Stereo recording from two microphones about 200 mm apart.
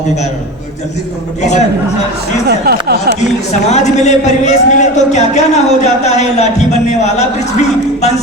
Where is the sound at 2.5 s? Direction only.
50° right (ahead or behind).